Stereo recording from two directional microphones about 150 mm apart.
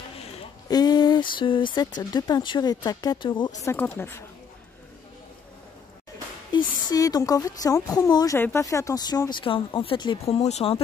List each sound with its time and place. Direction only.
0.7 s speech: 25° left (ahead or behind)
3.6 s speech: 15° left (ahead or behind)
6.5 s a sound: 30° left (ahead or behind)
6.9 s speech: 25° left (ahead or behind); by 10.8 s 45° left (ahead or behind)